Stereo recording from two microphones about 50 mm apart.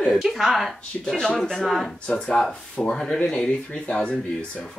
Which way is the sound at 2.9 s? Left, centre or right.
Centre.